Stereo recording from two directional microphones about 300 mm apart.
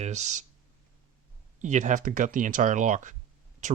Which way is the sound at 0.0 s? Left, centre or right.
Right.